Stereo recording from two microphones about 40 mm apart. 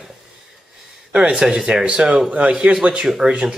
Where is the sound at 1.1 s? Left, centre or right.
Right.